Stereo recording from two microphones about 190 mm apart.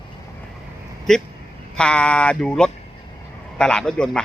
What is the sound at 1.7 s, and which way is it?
A man's voice, 5° left (ahead or behind).